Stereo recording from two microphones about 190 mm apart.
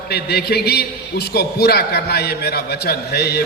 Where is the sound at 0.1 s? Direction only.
60° left (ahead or behind).